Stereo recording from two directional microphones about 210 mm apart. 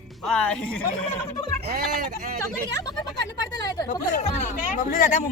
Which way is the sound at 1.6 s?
45° right (ahead or behind).